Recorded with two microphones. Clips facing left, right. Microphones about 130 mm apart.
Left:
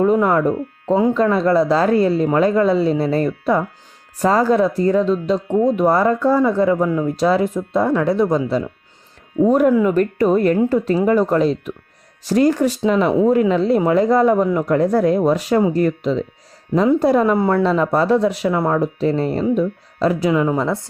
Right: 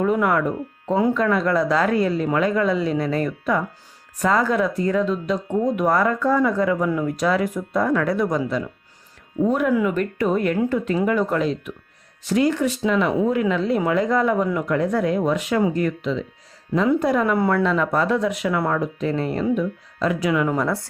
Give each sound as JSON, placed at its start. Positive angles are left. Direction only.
{"t": 0.0, "sound": "speech", "side_deg": 30}
{"t": 9.5, "sound": "speech", "side_deg": 40}